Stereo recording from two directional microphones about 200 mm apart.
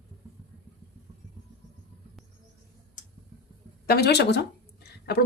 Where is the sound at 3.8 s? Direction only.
50° left (ahead or behind).